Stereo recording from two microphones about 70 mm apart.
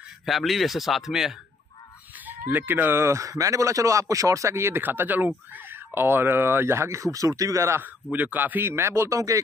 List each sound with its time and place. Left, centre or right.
0.2 s speech: centre
2.2 s speech: right
3.1 s speech: right
7.8 s speech: right